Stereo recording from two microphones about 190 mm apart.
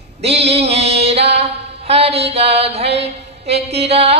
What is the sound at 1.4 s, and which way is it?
Mantra, 35° right (ahead or behind).